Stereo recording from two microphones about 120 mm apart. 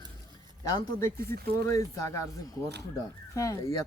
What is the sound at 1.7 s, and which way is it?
A woman's voice, 25° left (ahead or behind).